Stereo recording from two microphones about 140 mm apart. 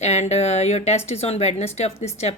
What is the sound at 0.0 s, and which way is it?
Speech, 55° left (ahead or behind).